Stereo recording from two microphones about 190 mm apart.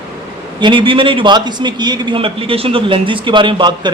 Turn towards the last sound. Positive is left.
turn(degrees=-25)  # may be behind; listen again after turning